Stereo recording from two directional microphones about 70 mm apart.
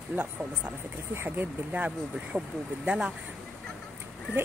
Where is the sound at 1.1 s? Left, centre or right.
Right.